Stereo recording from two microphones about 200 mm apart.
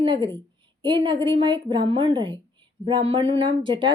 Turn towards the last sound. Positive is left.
turn(degrees=-25)  # may be behind; listen again after turning